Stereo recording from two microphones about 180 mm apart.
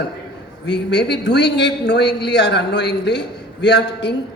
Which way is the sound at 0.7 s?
75° left (ahead or behind).